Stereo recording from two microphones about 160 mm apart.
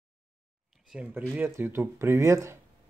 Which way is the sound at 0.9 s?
5° right (ahead or behind).